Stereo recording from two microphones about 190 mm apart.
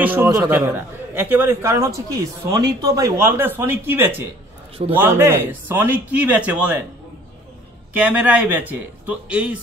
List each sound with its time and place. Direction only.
0.0 s a man's voice: 10° right (ahead or behind)
7.9 s speech: 5° right (ahead or behind)